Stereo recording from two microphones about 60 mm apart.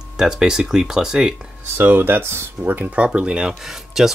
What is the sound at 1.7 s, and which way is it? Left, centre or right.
Speech, right.